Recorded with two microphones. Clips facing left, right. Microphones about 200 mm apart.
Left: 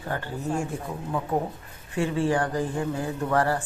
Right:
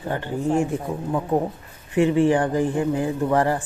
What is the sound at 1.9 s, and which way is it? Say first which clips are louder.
Speech: right 7 dB; 15° right (ahead or behind).